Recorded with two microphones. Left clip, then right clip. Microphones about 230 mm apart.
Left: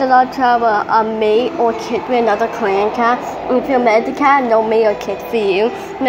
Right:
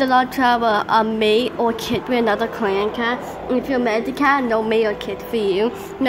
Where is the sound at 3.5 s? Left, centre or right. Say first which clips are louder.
Left 7 dB; centre.